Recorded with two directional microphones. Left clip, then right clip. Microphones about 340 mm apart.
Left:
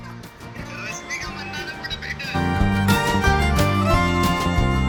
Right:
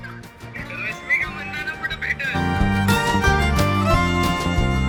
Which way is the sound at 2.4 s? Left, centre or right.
Centre.